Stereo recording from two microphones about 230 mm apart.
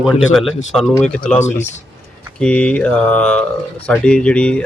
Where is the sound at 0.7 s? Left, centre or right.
Centre.